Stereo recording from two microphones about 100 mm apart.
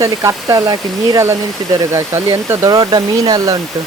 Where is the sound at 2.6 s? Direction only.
40° right (ahead or behind).